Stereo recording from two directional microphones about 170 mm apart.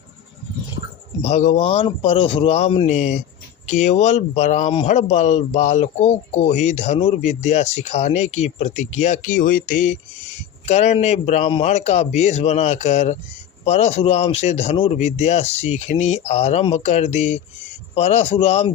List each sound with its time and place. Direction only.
1.2 s speech: 45° left (ahead or behind)